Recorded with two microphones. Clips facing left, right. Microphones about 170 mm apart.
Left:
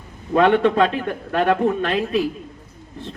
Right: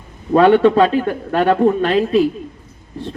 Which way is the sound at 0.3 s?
35° right (ahead or behind).